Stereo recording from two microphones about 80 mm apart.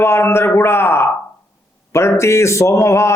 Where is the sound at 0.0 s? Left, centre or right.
Left.